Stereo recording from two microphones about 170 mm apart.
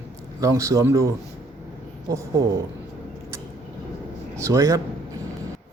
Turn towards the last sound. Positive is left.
turn(degrees=-20)  # may be behind; listen again after turning